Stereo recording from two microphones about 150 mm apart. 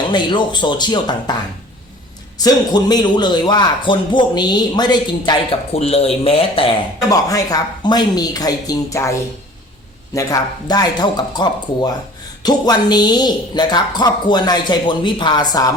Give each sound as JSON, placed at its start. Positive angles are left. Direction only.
{"t": 0.1, "sound": "a woman's voice", "side_deg": 30}
{"t": 5.7, "sound": "speech", "side_deg": 40}
{"t": 7.1, "sound": "a woman's voice", "side_deg": 25}
{"t": 10.2, "sound": "a woman's voice", "side_deg": 25}